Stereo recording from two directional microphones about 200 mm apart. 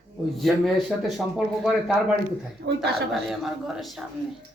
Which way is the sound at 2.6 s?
60° right (ahead or behind).